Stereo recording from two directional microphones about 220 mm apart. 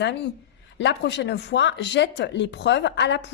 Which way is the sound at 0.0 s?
50° left (ahead or behind).